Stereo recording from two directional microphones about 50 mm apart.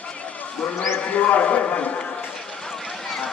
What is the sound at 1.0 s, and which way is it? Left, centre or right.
Speech, left.